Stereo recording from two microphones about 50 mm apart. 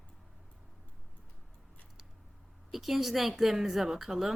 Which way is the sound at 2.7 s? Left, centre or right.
Centre.